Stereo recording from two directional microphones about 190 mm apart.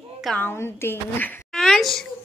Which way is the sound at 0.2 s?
5° left (ahead or behind).